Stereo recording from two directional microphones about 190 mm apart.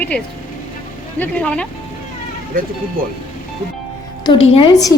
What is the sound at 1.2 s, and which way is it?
Speech, 5° left (ahead or behind).